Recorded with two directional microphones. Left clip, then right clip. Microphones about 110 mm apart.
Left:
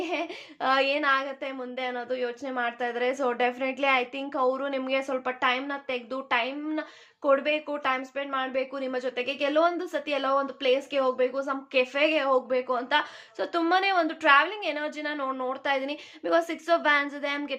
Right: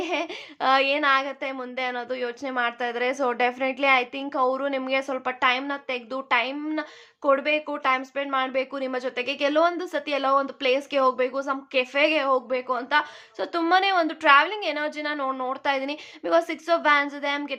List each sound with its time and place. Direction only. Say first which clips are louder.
0.0 s a woman's voice: right 3 dB; 20° right (ahead or behind)